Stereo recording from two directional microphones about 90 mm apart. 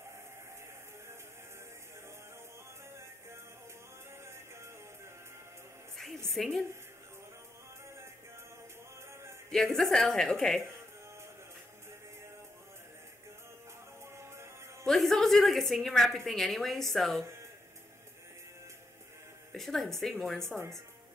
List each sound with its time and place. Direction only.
6.3 s a woman's voice: 5° left (ahead or behind)
9.5 s a woman's voice: 5° left (ahead or behind)
14.1 s music: 30° right (ahead or behind)
14.9 s a sound: 5° left (ahead or behind)
16.3 s a woman's voice: centre (ahead or behind)
19.5 s a woman's voice: 5° left (ahead or behind)